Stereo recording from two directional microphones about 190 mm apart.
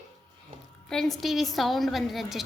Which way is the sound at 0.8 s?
Centre (ahead or behind).